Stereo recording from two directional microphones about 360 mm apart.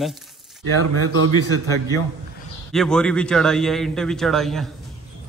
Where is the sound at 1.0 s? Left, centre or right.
Right.